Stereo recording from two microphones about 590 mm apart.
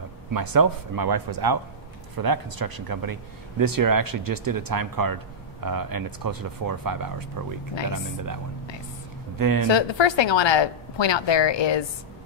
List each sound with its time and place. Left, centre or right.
0.3 s speech: right
9.4 s speech: right
9.7 s a woman's voice: left